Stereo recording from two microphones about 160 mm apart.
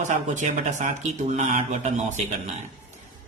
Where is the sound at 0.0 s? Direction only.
50° right (ahead or behind).